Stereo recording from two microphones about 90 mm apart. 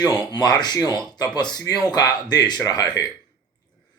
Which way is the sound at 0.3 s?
50° left (ahead or behind).